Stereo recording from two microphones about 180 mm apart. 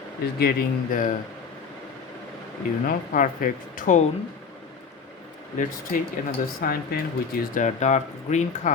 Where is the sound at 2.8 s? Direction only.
50° left (ahead or behind).